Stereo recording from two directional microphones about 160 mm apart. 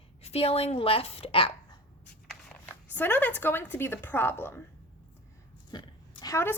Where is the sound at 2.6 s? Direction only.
10° left (ahead or behind).